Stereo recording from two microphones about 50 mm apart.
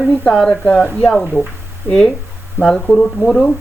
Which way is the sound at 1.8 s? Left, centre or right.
Right.